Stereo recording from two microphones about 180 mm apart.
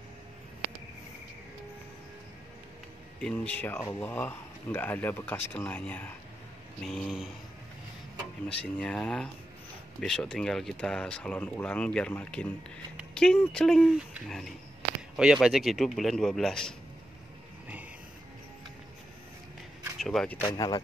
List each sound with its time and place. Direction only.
3.2 s speech: 5° left (ahead or behind)
8.5 s speech: 5° left (ahead or behind)
20.0 s speech: centre (ahead or behind)
20.3 s speech: 20° left (ahead or behind)